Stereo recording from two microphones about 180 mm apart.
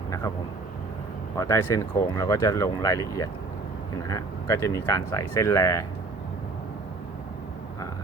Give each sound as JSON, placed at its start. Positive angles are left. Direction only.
{"t": 1.4, "sound": "speech", "side_deg": 15}
{"t": 4.0, "sound": "speech", "side_deg": 20}